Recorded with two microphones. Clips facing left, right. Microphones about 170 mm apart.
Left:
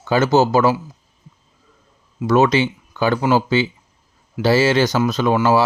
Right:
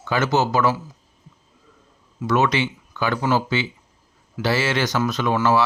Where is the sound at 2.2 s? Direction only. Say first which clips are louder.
Left 5 dB; 30° left (ahead or behind).